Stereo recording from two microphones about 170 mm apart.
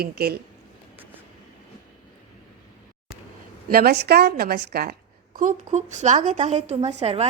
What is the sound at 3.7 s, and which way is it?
A woman's voice, 60° right (ahead or behind).